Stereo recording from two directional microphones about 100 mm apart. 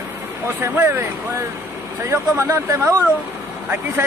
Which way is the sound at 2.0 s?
30° right (ahead or behind).